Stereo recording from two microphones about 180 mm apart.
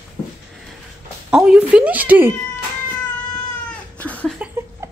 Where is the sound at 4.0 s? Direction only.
10° left (ahead or behind).